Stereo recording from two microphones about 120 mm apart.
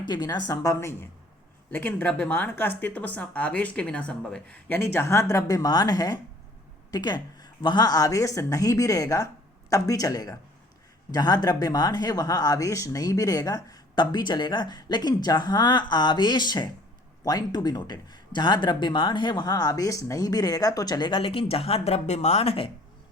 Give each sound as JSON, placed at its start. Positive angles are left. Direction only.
{"t": 0.0, "sound": "speech", "side_deg": 35}